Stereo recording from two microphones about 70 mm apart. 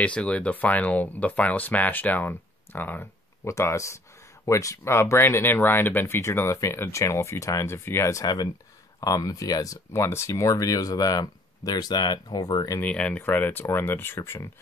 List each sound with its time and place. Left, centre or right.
0.0 s speech: centre
3.4 s speech: left
7.6 s speech: left
9.0 s speech: left
9.9 s speech: left
12.8 s speech: centre
13.2 s speech: left